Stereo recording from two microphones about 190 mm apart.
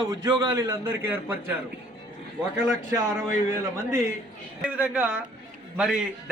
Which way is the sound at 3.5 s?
15° right (ahead or behind).